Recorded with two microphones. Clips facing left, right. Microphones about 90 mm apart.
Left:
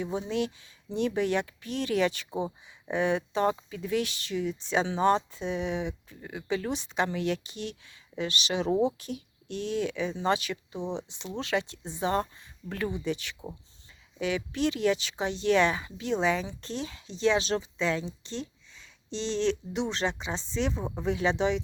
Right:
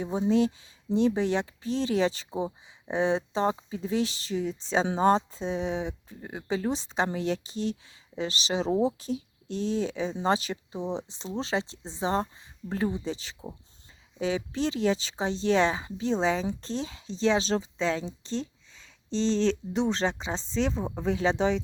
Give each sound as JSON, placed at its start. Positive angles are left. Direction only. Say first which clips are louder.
{"t": 0.0, "sound": "speech", "louder": "right 5 dB", "side_deg": -35}
{"t": 8.7, "sound": "speech", "louder": "even", "side_deg": 0}
{"t": 9.0, "sound": "speech", "louder": "right 5 dB", "side_deg": -30}